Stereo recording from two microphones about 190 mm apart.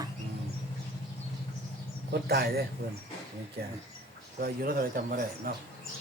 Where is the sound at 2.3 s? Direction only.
55° right (ahead or behind).